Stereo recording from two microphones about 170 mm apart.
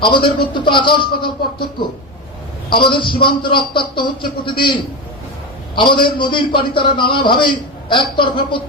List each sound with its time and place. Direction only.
0.0 s a man's voice: 30° left (ahead or behind)